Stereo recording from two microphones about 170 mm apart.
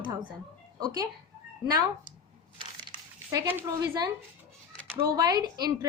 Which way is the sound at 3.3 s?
15° right (ahead or behind).